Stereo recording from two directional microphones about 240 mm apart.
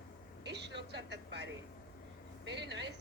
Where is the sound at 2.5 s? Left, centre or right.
Right.